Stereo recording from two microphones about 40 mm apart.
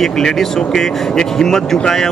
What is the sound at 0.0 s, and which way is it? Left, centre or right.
Speech, centre.